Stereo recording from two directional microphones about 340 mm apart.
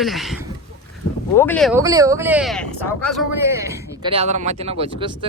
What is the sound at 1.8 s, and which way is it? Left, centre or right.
A man's voice, centre.